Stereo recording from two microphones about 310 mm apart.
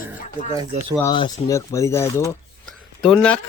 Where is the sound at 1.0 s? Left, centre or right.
Centre.